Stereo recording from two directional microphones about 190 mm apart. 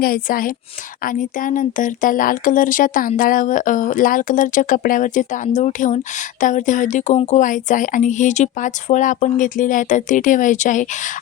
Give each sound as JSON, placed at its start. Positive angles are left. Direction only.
{"t": 0.0, "sound": "speech", "side_deg": 50}